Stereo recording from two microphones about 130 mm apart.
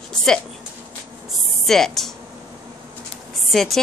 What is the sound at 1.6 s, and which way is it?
Speech, centre (ahead or behind).